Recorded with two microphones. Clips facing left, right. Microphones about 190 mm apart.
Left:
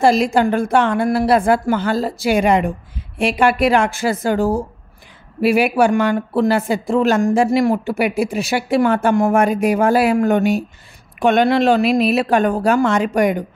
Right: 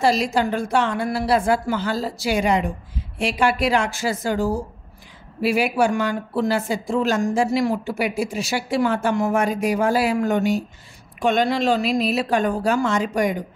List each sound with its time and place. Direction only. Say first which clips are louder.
0.0 s speech: left 5 dB; 50° left (ahead or behind)